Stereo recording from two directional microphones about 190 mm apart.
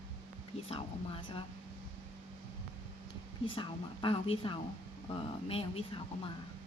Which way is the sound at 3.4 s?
25° left (ahead or behind).